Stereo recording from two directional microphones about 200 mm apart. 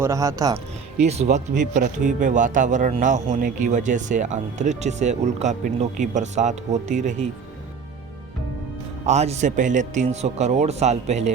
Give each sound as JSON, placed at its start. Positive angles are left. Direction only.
{"t": 0.0, "sound": "speech", "side_deg": -15}
{"t": 1.0, "sound": "speech", "side_deg": -35}
{"t": 9.0, "sound": "speech", "side_deg": -35}